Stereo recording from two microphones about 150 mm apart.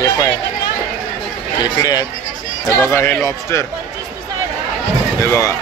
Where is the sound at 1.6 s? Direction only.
25° left (ahead or behind).